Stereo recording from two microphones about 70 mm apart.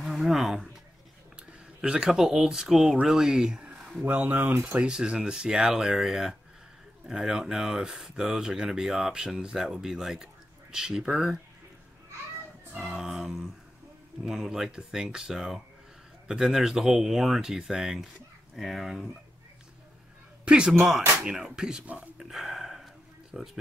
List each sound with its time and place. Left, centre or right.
0.0 s speech: centre
1.8 s speech: centre
4.0 s speech: right
4.7 s speech: centre
12.8 s speech: centre
20.4 s speech: centre
22.3 s a sound: centre
23.3 s speech: centre